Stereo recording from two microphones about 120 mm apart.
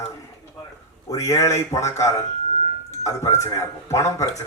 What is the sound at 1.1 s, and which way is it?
A man's voice, 25° left (ahead or behind).